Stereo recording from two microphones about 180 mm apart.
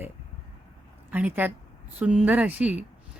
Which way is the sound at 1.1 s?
10° right (ahead or behind).